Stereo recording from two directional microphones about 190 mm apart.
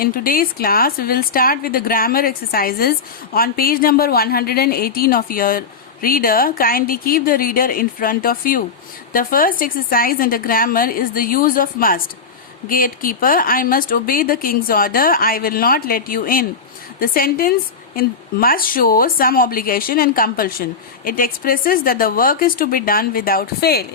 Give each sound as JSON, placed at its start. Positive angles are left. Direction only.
{"t": 0.0, "sound": "a woman's voice", "side_deg": 50}